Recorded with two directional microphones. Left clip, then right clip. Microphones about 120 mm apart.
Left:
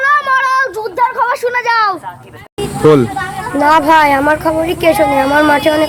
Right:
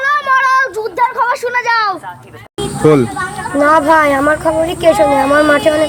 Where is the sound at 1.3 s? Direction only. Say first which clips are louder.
Even; 10° left (ahead or behind).